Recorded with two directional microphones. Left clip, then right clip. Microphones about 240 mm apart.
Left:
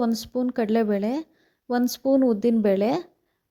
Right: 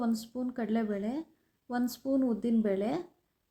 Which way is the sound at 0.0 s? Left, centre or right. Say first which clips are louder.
Left 9 dB; left.